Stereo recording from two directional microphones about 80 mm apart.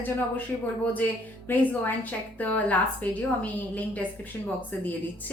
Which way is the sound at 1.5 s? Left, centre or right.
Left.